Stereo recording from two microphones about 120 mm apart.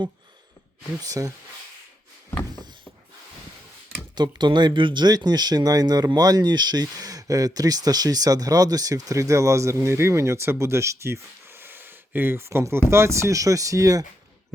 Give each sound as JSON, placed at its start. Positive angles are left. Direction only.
{"t": 1.0, "sound": "speech", "side_deg": -30}
{"t": 4.1, "sound": "speech", "side_deg": -40}